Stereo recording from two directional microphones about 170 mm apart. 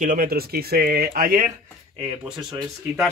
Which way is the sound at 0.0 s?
55° right (ahead or behind).